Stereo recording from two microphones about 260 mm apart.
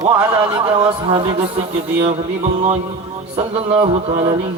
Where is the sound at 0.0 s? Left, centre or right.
Centre.